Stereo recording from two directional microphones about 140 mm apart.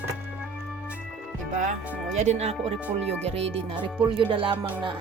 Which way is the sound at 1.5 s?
65° right (ahead or behind).